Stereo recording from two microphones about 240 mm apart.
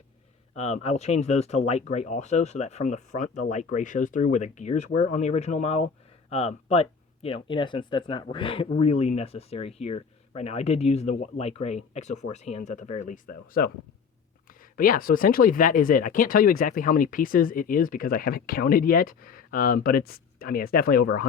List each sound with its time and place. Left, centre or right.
0.5 s speech: left
14.6 s speech: left